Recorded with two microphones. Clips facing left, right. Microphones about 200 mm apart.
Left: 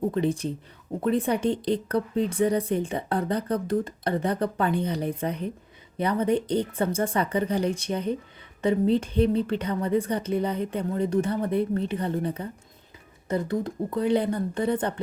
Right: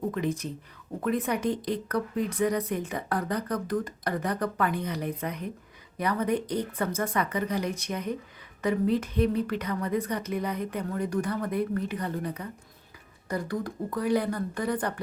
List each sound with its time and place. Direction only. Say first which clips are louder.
0.1 s speech: left 4 dB; 30° left (ahead or behind)